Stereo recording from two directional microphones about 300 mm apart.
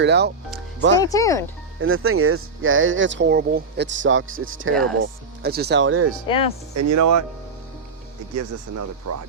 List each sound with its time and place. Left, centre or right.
0.0 s speech: right
0.9 s speech: centre
1.8 s speech: right
4.9 s speech: right
6.2 s speech: centre
6.7 s speech: right
8.4 s speech: right